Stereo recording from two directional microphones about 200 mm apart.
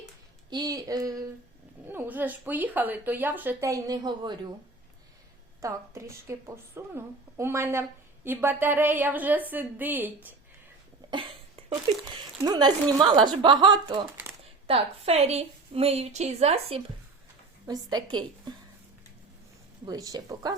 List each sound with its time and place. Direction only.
0.5 s a woman's voice: 20° right (ahead or behind)
5.6 s a woman's voice: 15° right (ahead or behind)
11.1 s cough: 25° right (ahead or behind)
12.4 s a woman's voice: 20° right (ahead or behind)
17.7 s a woman's voice: 20° right (ahead or behind)
19.8 s a woman's voice: 20° right (ahead or behind)